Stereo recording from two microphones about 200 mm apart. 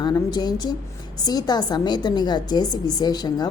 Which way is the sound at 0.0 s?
20° left (ahead or behind).